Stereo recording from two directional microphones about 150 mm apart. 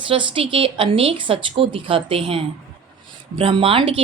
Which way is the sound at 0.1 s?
35° right (ahead or behind).